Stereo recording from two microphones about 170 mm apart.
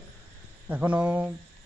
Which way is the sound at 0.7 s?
10° right (ahead or behind).